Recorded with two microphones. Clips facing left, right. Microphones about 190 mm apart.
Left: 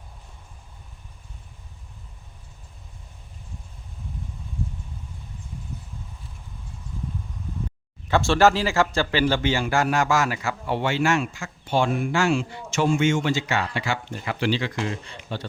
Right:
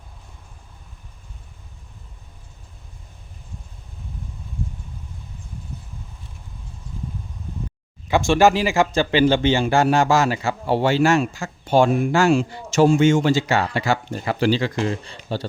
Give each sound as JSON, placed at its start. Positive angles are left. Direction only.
{"t": 8.0, "sound": "speech", "side_deg": -15}